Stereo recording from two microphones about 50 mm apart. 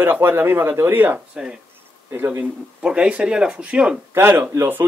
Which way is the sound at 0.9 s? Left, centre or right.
Right.